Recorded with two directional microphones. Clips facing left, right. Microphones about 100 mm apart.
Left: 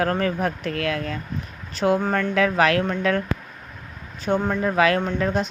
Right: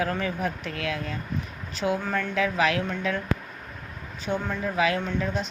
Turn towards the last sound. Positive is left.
turn(degrees=55)  # may be behind; listen again after turning